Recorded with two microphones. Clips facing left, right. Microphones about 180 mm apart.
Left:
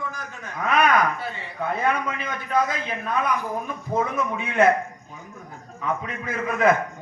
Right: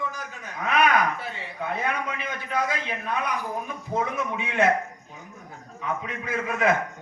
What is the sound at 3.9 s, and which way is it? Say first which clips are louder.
Speech: left 3 dB; 45° left (ahead or behind).